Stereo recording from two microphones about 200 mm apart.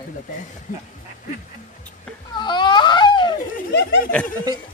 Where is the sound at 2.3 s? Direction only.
20° left (ahead or behind).